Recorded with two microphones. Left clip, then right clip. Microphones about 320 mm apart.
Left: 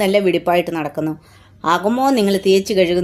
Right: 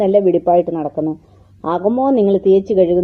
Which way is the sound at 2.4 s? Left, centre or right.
Centre.